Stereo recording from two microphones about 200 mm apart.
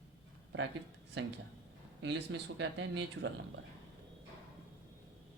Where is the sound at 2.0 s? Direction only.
60° right (ahead or behind).